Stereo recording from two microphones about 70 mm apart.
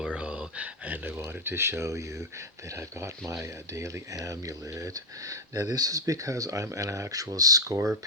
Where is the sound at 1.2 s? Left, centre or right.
Right.